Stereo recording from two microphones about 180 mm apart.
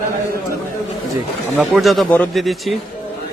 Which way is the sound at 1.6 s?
Centre (ahead or behind).